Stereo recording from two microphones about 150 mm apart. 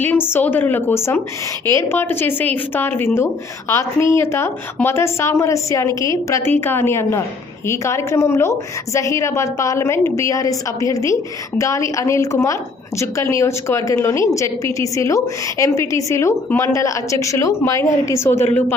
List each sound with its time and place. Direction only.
0.0 s a woman's voice: 15° left (ahead or behind)